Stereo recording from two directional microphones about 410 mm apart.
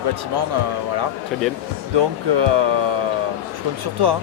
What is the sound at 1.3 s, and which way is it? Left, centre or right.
Speech, centre.